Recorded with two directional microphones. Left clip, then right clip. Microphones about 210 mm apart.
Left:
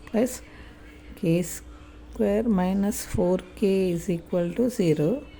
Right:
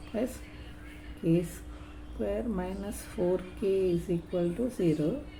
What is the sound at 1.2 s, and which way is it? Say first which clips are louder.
Speech: left 4 dB; 45° left (ahead or behind).